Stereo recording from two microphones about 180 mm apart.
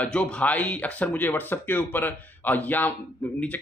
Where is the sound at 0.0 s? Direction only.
5° left (ahead or behind).